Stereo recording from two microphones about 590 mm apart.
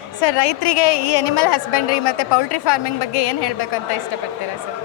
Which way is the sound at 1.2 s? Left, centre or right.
Left.